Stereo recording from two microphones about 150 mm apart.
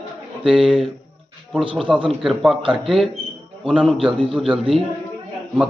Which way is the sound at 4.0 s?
35° right (ahead or behind).